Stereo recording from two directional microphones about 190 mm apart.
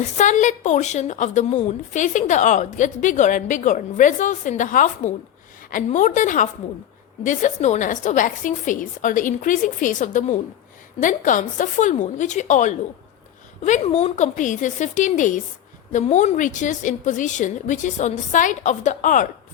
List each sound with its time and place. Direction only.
0.2 s a woman's voice: 40° left (ahead or behind)